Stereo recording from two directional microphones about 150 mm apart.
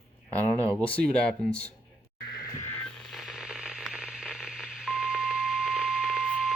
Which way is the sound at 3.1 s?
Centre (ahead or behind).